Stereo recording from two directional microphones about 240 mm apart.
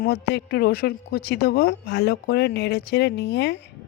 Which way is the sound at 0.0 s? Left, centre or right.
Left.